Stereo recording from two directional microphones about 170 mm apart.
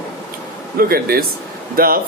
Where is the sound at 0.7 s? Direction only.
60° right (ahead or behind).